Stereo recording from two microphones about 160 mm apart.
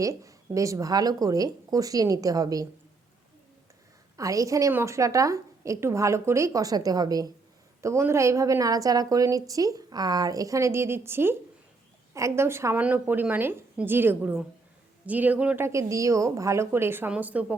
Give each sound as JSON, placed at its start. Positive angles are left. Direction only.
{"t": 0.0, "sound": "a woman's voice", "side_deg": -20}
{"t": 4.2, "sound": "a woman's voice", "side_deg": -20}